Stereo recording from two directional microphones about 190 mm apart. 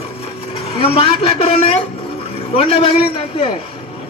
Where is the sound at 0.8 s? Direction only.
30° left (ahead or behind).